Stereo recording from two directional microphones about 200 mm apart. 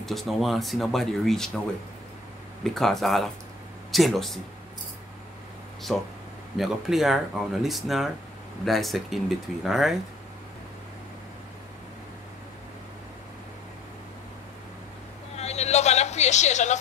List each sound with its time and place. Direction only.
0.0 s speech: centre (ahead or behind)
2.6 s speech: centre (ahead or behind)
5.9 s speech: centre (ahead or behind)
15.3 s a sound: 35° left (ahead or behind)